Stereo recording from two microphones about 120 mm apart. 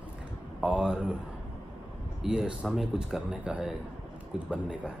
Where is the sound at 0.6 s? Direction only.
5° right (ahead or behind).